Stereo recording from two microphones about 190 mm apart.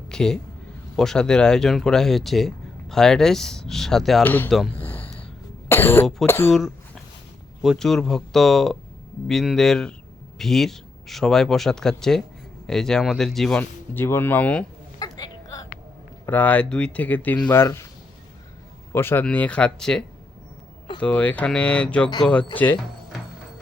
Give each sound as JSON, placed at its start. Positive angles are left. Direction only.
{"t": 0.1, "sound": "a sound", "side_deg": 5}
{"t": 0.9, "sound": "speech", "side_deg": 5}
{"t": 4.9, "sound": "gasp", "side_deg": 10}
{"t": 5.6, "sound": "speech", "side_deg": 10}
{"t": 6.5, "sound": "a sound", "side_deg": 0}
{"t": 7.6, "sound": "speech", "side_deg": 0}
{"t": 14.9, "sound": "a sound", "side_deg": 20}
{"t": 16.2, "sound": "speech", "side_deg": 10}
{"t": 18.9, "sound": "speech", "side_deg": 10}